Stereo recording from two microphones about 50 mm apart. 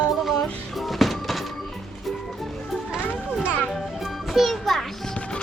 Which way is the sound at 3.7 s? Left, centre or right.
Centre.